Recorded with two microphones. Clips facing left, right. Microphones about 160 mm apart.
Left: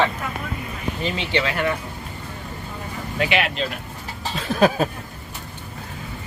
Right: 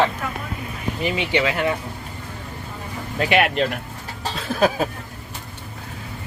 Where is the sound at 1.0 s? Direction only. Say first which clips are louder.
Right 3 dB; 15° right (ahead or behind).